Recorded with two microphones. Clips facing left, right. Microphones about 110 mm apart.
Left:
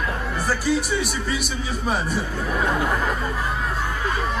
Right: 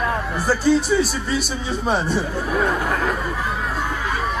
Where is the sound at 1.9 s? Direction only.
Centre (ahead or behind).